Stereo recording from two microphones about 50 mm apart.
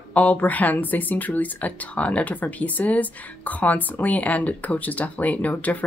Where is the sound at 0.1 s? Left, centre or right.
Left.